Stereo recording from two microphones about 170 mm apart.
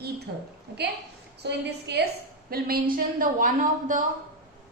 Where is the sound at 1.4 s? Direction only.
80° right.